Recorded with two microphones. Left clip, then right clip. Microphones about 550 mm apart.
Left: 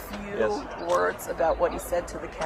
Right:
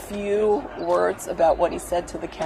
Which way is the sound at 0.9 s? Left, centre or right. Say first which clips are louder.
Right 4 dB; right.